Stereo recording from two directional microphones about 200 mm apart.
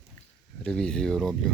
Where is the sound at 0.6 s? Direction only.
5° left (ahead or behind).